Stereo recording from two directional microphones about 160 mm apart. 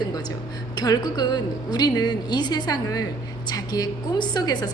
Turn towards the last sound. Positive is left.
turn(degrees=25)  # may be behind; listen again after turning